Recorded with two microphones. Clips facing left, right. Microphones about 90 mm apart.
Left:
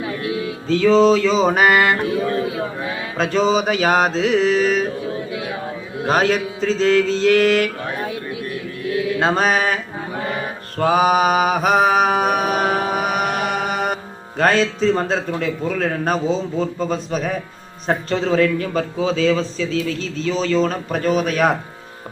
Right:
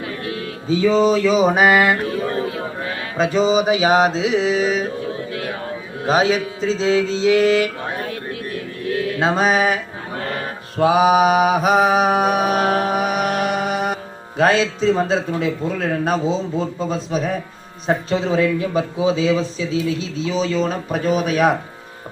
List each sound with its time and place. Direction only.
0.7 s a man's voice: 10° right (ahead or behind)
3.2 s mantra: 10° right (ahead or behind)
6.3 s mantra: 5° right (ahead or behind)
9.1 s mantra: centre (ahead or behind)
13.2 s music: centre (ahead or behind)
17.8 s a man's voice: 5° right (ahead or behind)
21.2 s mantra: centre (ahead or behind)